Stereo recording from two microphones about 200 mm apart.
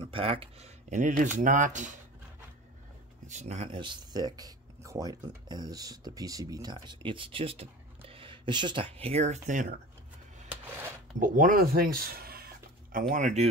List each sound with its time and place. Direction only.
0.0 s speech: 30° right (ahead or behind)
3.3 s speech: 35° right (ahead or behind)
11.1 s speech: 40° right (ahead or behind)
13.1 s speech: 35° right (ahead or behind)